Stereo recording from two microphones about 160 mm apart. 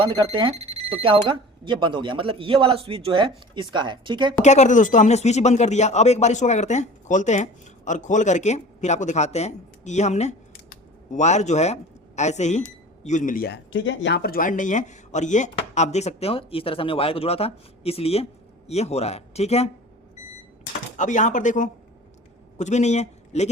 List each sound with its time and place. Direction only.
0.0 s speech: 30° right (ahead or behind)
4.4 s speech: 45° left (ahead or behind); by 13.6 s 65° left (ahead or behind)
14.1 s speech: 80° left; by 19.7 s 40° left (ahead or behind)
20.9 s speech: 50° left (ahead or behind)